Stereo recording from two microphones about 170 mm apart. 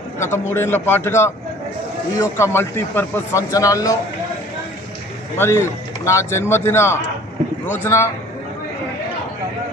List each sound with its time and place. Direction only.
0.2 s a man's voice: 15° left (ahead or behind)
5.4 s a man's voice: 15° left (ahead or behind)